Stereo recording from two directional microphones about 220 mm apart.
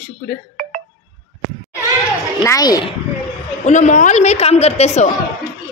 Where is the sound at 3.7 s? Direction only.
35° left (ahead or behind).